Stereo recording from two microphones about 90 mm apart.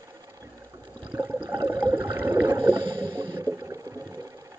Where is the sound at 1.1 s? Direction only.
20° right (ahead or behind); by 4.2 s 40° right (ahead or behind).